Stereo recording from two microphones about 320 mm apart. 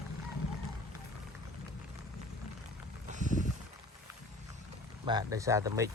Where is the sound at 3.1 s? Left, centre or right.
Right.